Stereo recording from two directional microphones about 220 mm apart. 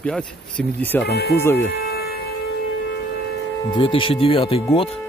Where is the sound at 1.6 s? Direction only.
45° left (ahead or behind).